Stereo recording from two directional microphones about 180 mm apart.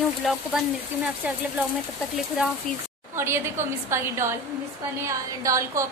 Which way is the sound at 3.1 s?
15° right (ahead or behind).